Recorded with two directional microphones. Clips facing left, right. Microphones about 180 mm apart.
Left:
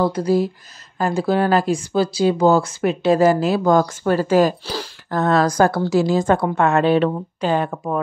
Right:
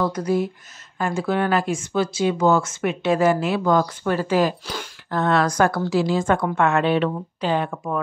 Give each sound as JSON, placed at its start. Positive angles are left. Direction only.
{"t": 0.0, "sound": "speech", "side_deg": 30}